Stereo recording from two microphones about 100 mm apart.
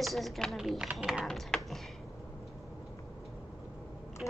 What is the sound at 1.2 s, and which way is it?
Speech, 5° left (ahead or behind).